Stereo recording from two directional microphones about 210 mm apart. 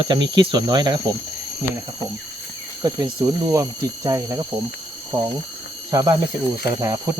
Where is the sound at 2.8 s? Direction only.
20° right (ahead or behind).